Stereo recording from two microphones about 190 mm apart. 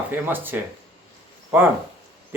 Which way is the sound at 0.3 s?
10° right (ahead or behind).